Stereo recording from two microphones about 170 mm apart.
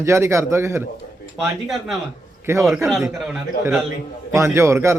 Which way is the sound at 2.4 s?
15° right (ahead or behind).